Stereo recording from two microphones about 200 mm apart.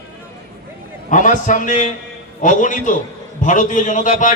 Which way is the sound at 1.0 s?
40° left (ahead or behind).